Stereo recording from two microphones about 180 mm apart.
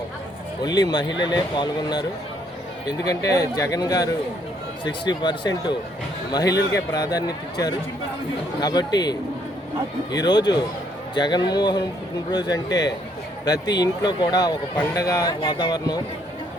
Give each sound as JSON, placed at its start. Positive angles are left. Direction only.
{"t": 0.6, "sound": "speech", "side_deg": 20}
{"t": 3.1, "sound": "speech", "side_deg": 15}
{"t": 8.6, "sound": "speech", "side_deg": 20}